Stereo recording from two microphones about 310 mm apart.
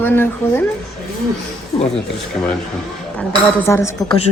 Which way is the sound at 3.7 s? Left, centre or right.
Centre.